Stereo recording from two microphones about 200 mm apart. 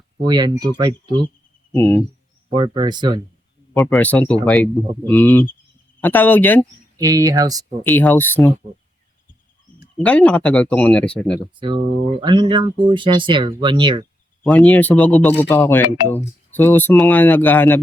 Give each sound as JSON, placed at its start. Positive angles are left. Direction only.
{"t": 0.3, "sound": "speech", "side_deg": -20}
{"t": 1.7, "sound": "speech", "side_deg": 10}
{"t": 2.5, "sound": "speech", "side_deg": -25}
{"t": 3.8, "sound": "speech", "side_deg": 10}
{"t": 7.0, "sound": "speech", "side_deg": -15}
{"t": 7.9, "sound": "speech", "side_deg": 10}
{"t": 10.0, "sound": "speech", "side_deg": 5}
{"t": 12.2, "sound": "speech", "side_deg": -20}
{"t": 14.4, "sound": "speech", "side_deg": 5}